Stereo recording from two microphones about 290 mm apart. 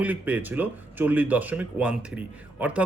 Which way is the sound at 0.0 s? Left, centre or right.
Centre.